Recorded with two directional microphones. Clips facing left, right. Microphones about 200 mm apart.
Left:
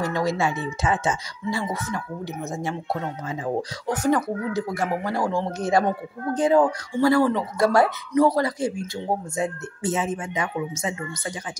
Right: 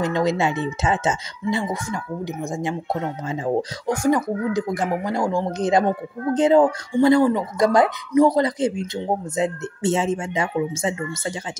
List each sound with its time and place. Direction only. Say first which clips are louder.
0.0 s speech: right 3 dB; 20° right (ahead or behind)
3.8 s speech: right 1 dB; 10° right (ahead or behind); by 11.3 s 30° right (ahead or behind)